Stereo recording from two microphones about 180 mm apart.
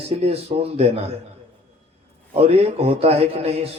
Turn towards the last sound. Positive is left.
turn(degrees=-35)  # may be behind; listen again after turning